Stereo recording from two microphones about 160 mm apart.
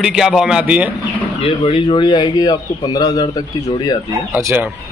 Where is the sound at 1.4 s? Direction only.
35° left (ahead or behind).